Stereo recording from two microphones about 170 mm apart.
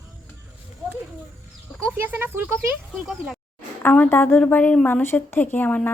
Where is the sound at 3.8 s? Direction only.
10° left (ahead or behind).